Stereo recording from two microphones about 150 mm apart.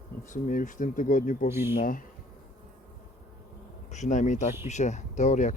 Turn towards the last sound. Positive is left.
turn(degrees=50)  # may be behind; listen again after turning